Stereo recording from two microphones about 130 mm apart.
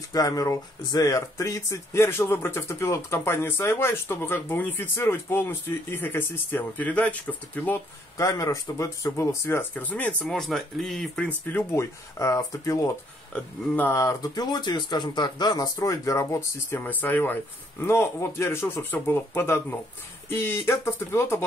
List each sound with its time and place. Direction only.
0.1 s speech: 25° left (ahead or behind)
8.2 s speech: 25° left (ahead or behind)
10.2 s speech: centre (ahead or behind); by 21.4 s 20° left (ahead or behind)